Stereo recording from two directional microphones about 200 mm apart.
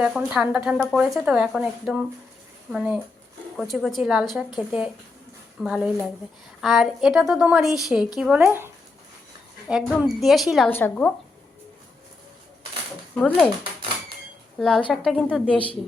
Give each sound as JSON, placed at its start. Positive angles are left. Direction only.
{"t": 0.0, "sound": "speech", "side_deg": -5}
{"t": 10.0, "sound": "speech", "side_deg": 0}
{"t": 10.7, "sound": "a woman's voice", "side_deg": 10}
{"t": 13.1, "sound": "speech", "side_deg": 5}
{"t": 14.6, "sound": "speech", "side_deg": 5}
{"t": 15.4, "sound": "a woman's voice", "side_deg": 25}